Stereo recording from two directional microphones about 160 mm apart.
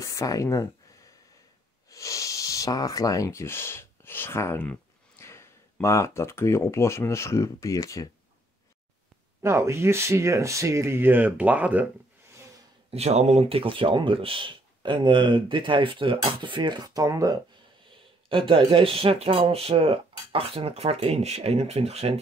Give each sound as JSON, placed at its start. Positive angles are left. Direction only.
{"t": 0.0, "sound": "speech", "side_deg": 20}
{"t": 1.9, "sound": "speech", "side_deg": 20}
{"t": 9.4, "sound": "speech", "side_deg": -15}
{"t": 12.9, "sound": "speech", "side_deg": -40}
{"t": 18.3, "sound": "speech", "side_deg": -30}